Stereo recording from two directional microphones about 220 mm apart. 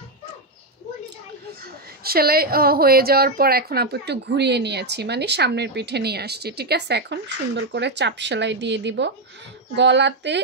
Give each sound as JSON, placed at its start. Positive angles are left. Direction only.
{"t": 1.6, "sound": "a woman's voice", "side_deg": -45}